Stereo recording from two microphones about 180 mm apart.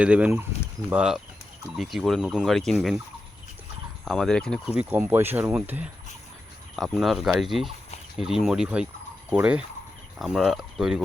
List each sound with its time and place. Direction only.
0.0 s speech: 5° right (ahead or behind)
4.0 s speech: centre (ahead or behind)
4.8 s speech: 10° right (ahead or behind)